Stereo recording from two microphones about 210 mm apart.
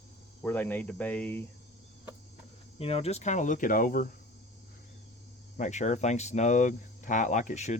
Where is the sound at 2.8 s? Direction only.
30° left (ahead or behind).